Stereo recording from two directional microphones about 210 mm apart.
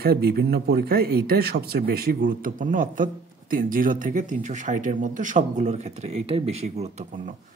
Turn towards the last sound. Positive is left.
turn(degrees=-35)  # may be behind; listen again after turning